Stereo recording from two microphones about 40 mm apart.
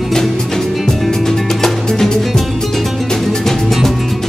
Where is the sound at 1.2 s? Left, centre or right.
Centre.